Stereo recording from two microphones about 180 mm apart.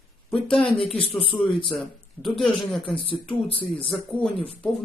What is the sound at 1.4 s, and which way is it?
Speech, 30° left (ahead or behind).